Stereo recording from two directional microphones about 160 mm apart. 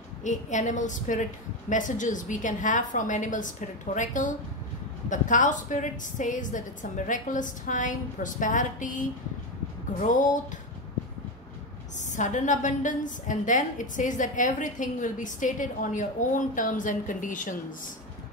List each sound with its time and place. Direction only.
0.2 s a woman's voice: 50° left (ahead or behind)
12.0 s a woman's voice: 50° left (ahead or behind)